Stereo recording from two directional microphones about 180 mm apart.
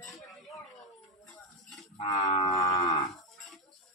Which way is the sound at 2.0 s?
25° left (ahead or behind).